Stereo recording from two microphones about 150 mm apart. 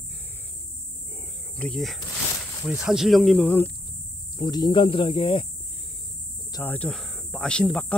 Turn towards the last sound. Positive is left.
turn(degrees=5)  # may be behind; listen again after turning